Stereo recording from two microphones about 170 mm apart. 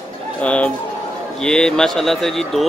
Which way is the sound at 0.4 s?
5° left (ahead or behind).